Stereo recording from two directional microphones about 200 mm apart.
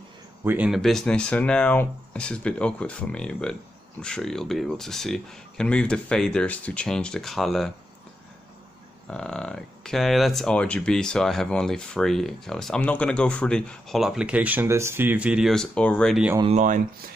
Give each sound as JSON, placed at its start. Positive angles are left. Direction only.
{"t": 0.4, "sound": "speech", "side_deg": -10}
{"t": 9.0, "sound": "speech", "side_deg": 5}
{"t": 16.5, "sound": "speech", "side_deg": -40}